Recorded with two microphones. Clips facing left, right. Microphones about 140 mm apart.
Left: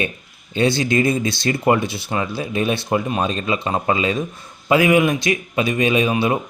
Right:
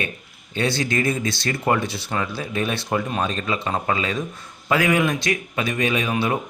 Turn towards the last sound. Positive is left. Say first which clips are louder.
# left 4 dB
turn(degrees=15)  # may be behind; listen again after turning